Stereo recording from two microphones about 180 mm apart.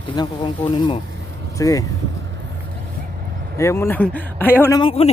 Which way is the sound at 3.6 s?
15° left (ahead or behind).